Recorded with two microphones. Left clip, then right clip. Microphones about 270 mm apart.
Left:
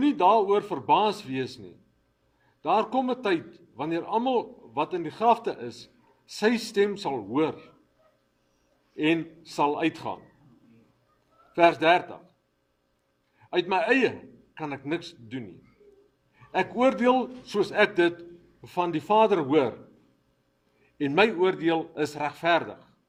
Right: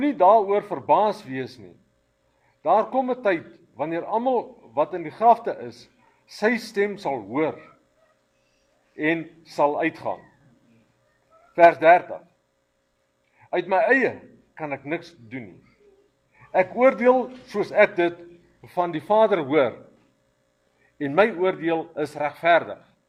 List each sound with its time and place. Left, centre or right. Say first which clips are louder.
0.0 s a man's voice: right 4 dB; left
6.7 s a man's voice: right 1 dB; left
9.0 s a man's voice: right 1 dB; left
11.5 s a man's voice: right 6 dB; left
13.5 s a man's voice: right 4 dB; left
16.5 s a man's voice: right 5 dB; left
21.0 s a man's voice: right 2 dB; left